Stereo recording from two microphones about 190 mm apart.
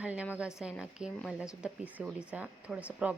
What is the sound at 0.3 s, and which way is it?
Speech, 5° right (ahead or behind).